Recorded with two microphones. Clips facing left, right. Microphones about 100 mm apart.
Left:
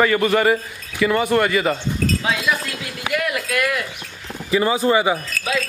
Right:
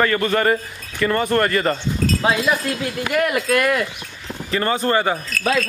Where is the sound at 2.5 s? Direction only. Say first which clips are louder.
Right 3 dB; 40° right (ahead or behind).